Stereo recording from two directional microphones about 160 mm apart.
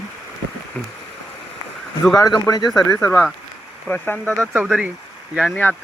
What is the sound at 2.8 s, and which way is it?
Speech, 15° left (ahead or behind).